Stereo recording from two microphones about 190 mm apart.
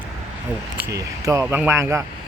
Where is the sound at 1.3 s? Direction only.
10° right (ahead or behind).